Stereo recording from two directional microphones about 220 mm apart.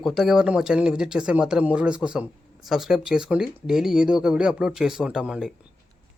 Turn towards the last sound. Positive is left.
turn(degrees=-5)  # may be behind; listen again after turning